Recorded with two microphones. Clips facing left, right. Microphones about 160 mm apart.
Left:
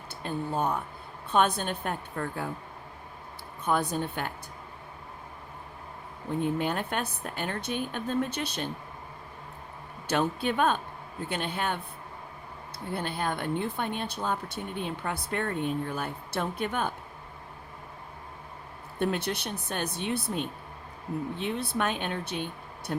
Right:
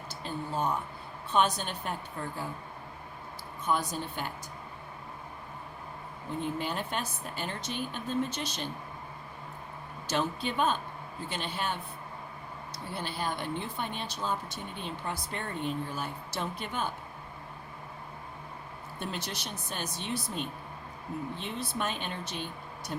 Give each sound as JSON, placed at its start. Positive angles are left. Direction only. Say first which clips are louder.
{"t": 0.3, "sound": "speech", "louder": "left 3 dB", "side_deg": 55}
{"t": 3.7, "sound": "speech", "louder": "left 3 dB", "side_deg": 55}
{"t": 6.4, "sound": "speech", "louder": "left 5 dB", "side_deg": 55}
{"t": 10.1, "sound": "speech", "louder": "left 4 dB", "side_deg": 55}
{"t": 12.9, "sound": "speech", "louder": "left 4 dB", "side_deg": 55}
{"t": 18.9, "sound": "speech", "louder": "left 9 dB", "side_deg": 60}
{"t": 21.3, "sound": "speech", "louder": "left 5 dB", "side_deg": 60}